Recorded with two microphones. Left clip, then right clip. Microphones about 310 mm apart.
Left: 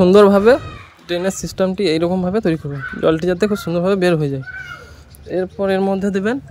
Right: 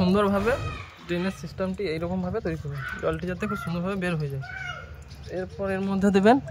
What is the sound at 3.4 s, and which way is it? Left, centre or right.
Speech, centre.